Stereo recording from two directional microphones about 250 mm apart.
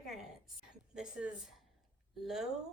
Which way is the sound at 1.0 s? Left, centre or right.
Centre.